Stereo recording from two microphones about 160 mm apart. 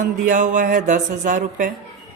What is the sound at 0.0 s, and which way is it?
Speech, 50° right (ahead or behind).